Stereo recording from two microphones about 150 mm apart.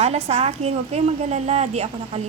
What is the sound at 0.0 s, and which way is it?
A woman's voice, 45° right (ahead or behind).